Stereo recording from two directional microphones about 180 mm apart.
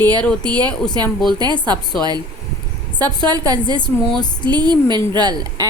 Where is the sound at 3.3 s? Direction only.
20° right (ahead or behind).